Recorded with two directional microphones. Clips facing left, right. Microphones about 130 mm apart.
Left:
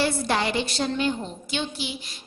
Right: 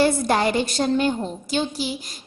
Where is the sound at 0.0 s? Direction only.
45° right (ahead or behind).